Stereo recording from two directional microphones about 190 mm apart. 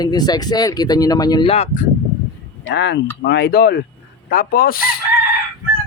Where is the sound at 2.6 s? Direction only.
65° left (ahead or behind).